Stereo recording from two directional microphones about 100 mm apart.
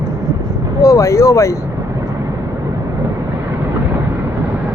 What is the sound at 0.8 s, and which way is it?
Vehicle, 35° left (ahead or behind).